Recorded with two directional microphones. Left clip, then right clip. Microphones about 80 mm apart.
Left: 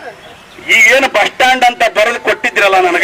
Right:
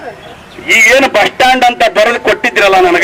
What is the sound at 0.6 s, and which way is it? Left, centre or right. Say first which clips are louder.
A man's voice: right 1 dB; right.